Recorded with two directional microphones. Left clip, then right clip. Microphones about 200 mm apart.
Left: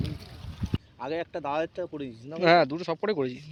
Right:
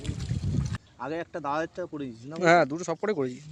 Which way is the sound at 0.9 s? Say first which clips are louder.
Left 1 dB; 55° right (ahead or behind).